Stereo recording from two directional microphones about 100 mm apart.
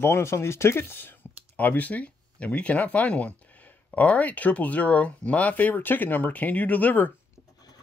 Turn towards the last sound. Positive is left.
turn(degrees=15)  # may be behind; listen again after turning